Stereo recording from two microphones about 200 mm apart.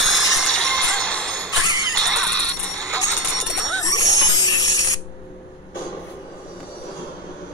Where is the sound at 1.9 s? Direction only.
5° left (ahead or behind).